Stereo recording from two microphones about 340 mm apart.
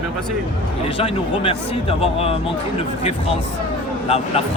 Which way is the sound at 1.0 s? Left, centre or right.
Centre.